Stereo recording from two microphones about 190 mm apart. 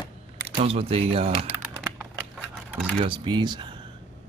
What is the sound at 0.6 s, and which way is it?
Speech, 30° right (ahead or behind).